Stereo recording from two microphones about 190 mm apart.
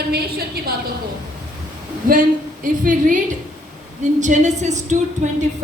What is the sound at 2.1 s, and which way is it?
A woman's voice, 45° right (ahead or behind).